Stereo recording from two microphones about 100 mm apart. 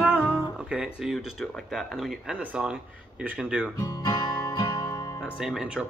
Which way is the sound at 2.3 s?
10° right (ahead or behind).